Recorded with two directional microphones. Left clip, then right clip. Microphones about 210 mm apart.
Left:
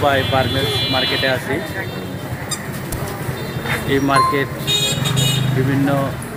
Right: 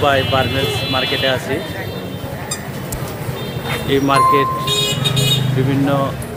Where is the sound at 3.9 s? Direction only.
Centre (ahead or behind).